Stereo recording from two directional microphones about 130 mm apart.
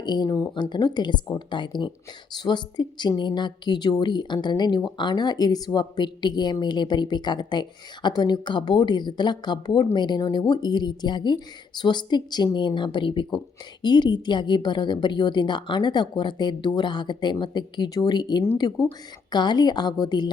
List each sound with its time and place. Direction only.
0.0 s a woman's voice: 35° left (ahead or behind)